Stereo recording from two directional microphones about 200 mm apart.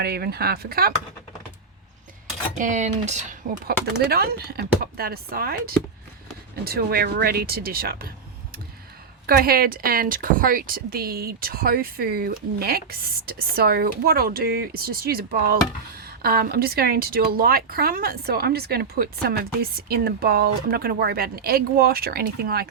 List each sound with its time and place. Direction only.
0.0 s a woman's voice: 50° right (ahead or behind)
2.6 s speech: 40° right (ahead or behind)
4.1 s a woman's voice: 50° right (ahead or behind)
9.2 s a woman's voice: 50° right (ahead or behind)